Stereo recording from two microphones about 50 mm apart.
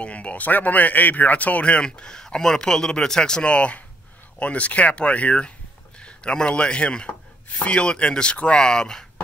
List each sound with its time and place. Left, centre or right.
0.0 s speech: left